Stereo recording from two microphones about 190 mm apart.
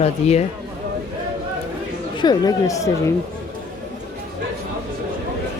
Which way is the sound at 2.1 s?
20° left (ahead or behind).